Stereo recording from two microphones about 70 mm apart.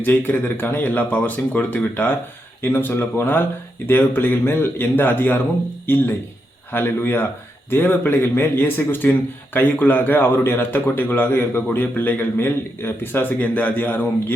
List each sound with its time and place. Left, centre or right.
0.0 s a man's voice: left